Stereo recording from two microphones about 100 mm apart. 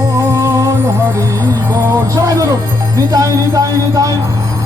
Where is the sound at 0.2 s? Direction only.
35° right (ahead or behind).